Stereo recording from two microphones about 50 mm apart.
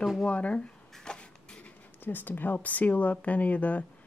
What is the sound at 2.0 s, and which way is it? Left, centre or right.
Speech, left.